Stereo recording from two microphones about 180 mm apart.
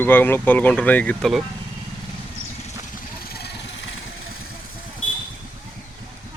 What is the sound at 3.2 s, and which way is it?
Vehicle, 60° left (ahead or behind).